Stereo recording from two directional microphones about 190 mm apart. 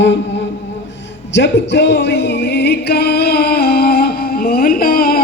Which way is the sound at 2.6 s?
55° left (ahead or behind).